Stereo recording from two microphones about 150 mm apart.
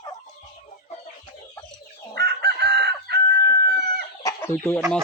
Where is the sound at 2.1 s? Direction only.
90° right.